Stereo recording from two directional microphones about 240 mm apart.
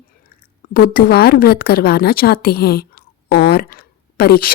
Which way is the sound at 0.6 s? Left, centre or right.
Left.